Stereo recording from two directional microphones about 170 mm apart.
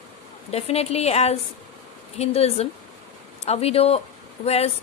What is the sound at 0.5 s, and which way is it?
Speech, 35° left (ahead or behind).